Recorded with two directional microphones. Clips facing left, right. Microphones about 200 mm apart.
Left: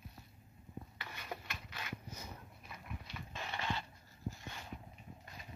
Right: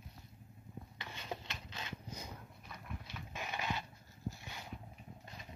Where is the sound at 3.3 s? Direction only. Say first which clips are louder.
Even; 15° right (ahead or behind).